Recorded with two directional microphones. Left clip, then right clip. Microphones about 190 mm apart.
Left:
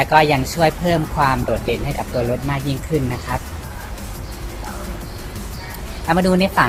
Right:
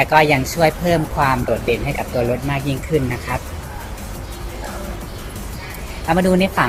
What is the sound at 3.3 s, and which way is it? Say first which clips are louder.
Speech: even; 15° left (ahead or behind).